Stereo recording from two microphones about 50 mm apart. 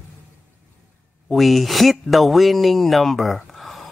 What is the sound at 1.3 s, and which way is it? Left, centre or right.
A man's voice, centre.